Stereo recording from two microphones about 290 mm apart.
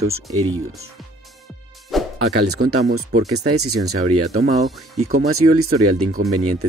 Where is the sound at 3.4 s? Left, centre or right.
Right.